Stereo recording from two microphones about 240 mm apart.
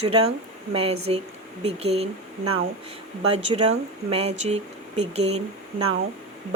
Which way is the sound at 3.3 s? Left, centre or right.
Right.